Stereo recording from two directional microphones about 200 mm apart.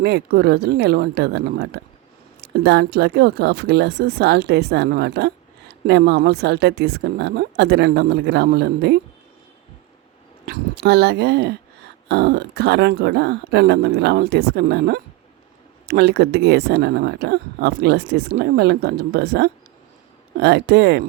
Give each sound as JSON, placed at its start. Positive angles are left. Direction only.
{"t": 0.0, "sound": "speech", "side_deg": -55}
{"t": 10.4, "sound": "speech", "side_deg": -55}